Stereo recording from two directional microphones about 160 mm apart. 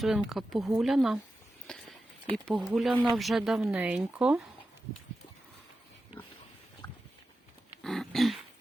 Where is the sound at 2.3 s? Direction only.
Centre (ahead or behind).